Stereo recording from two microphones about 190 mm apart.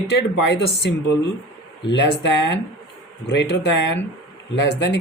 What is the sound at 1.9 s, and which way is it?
Speech, 70° left (ahead or behind).